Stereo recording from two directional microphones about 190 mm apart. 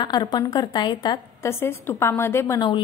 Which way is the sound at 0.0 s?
20° left (ahead or behind).